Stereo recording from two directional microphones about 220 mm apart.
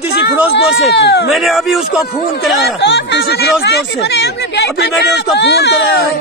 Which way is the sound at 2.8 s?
50° left (ahead or behind).